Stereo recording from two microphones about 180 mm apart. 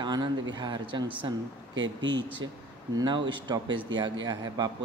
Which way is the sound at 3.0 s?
25° right (ahead or behind).